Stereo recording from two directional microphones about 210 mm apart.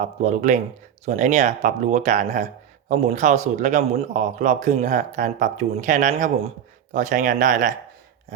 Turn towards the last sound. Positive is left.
turn(degrees=-40)  # may be behind; listen again after turning